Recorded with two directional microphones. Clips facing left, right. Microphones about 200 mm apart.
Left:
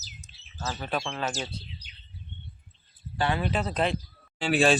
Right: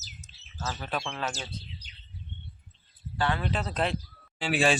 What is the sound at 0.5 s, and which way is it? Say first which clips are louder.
Speech: left 2 dB; 5° left (ahead or behind).